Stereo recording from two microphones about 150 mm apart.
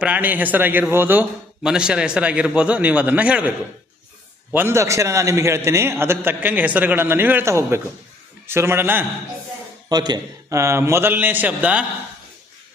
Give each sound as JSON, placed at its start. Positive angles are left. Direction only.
{"t": 0.0, "sound": "a man's voice", "side_deg": -10}
{"t": 4.5, "sound": "a man's voice", "side_deg": -15}
{"t": 9.9, "sound": "a man's voice", "side_deg": -25}